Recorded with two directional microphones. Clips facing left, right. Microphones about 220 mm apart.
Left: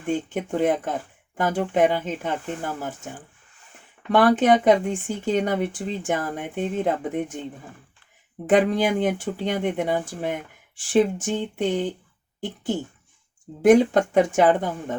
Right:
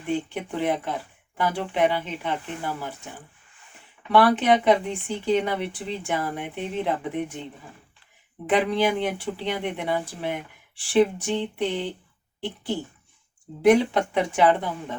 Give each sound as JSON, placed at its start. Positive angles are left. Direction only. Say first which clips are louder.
{"t": 0.0, "sound": "speech", "louder": "left 2 dB", "side_deg": 45}
{"t": 4.1, "sound": "speech", "louder": "left 2 dB", "side_deg": 45}
{"t": 8.4, "sound": "speech", "louder": "left 3 dB", "side_deg": 45}
{"t": 13.6, "sound": "speech", "louder": "left 3 dB", "side_deg": 45}